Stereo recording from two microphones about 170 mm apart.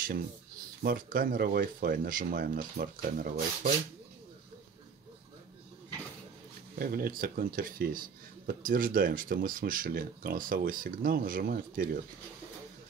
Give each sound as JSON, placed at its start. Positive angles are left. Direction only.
{"t": 0.8, "sound": "speech", "side_deg": -55}
{"t": 6.8, "sound": "speech", "side_deg": -60}